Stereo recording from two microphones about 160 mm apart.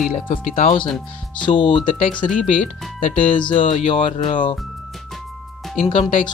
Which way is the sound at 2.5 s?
55° left (ahead or behind).